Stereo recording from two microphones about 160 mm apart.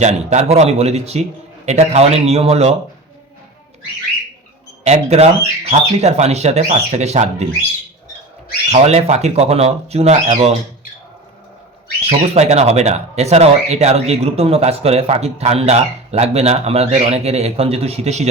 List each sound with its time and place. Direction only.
0.0 s speech: 45° right (ahead or behind)
4.9 s speech: 40° right (ahead or behind)
8.7 s speech: 40° right (ahead or behind)
12.0 s speech: 40° right (ahead or behind)